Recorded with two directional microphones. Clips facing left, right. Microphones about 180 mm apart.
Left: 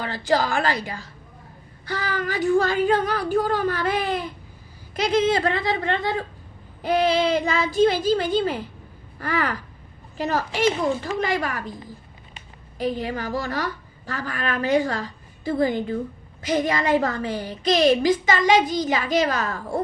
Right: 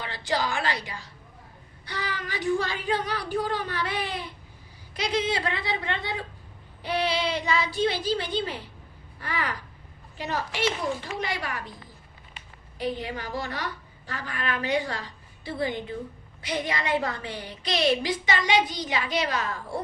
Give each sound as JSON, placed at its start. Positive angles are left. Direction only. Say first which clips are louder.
{"t": 0.0, "sound": "a woman's voice", "louder": "left 6 dB", "side_deg": 45}
{"t": 9.1, "sound": "a sound", "louder": "left 7 dB", "side_deg": 45}
{"t": 10.2, "sound": "a woman's voice", "louder": "left 6 dB", "side_deg": 40}
{"t": 12.8, "sound": "a woman's voice", "louder": "left 5 dB", "side_deg": 45}